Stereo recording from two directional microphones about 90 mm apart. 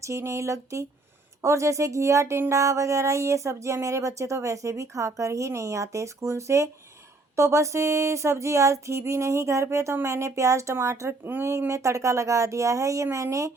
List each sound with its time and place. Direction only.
0.0 s speech: 35° right (ahead or behind)